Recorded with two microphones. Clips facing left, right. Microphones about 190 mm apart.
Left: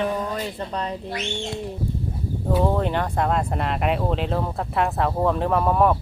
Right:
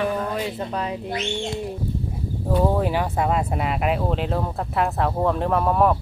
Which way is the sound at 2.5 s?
5° right (ahead or behind).